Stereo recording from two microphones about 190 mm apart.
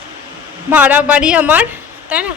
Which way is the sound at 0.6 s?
10° right (ahead or behind).